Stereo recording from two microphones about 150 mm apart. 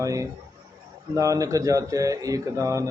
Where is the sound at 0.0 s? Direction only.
20° right (ahead or behind).